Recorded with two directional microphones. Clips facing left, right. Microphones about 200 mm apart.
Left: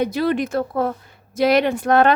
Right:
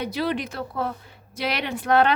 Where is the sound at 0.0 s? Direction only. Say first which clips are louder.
Left 6 dB; 50° left (ahead or behind).